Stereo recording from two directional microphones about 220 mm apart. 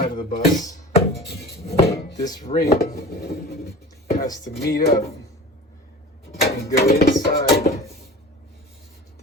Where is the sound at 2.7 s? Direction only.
45° left (ahead or behind).